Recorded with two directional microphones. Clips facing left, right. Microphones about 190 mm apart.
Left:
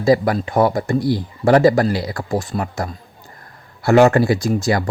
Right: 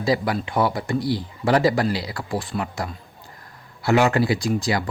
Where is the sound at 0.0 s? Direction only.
45° left (ahead or behind).